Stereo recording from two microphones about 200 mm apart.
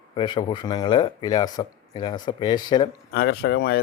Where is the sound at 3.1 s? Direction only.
55° left (ahead or behind).